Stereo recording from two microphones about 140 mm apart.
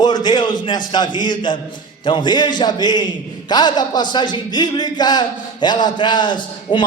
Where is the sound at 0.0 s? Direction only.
30° left (ahead or behind).